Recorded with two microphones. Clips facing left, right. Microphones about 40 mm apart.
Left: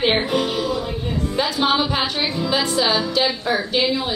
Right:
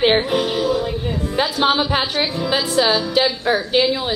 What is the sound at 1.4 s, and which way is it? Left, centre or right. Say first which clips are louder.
Music: right 2 dB; centre.